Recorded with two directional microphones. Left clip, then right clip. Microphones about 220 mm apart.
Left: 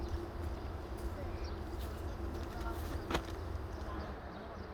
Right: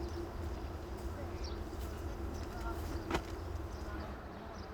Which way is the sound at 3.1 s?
15° left (ahead or behind).